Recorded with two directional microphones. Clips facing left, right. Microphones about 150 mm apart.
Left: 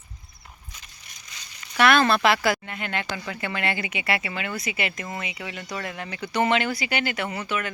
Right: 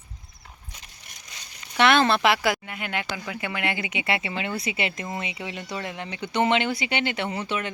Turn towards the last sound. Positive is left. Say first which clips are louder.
# even
turn(degrees=-30)  # may be behind; listen again after turning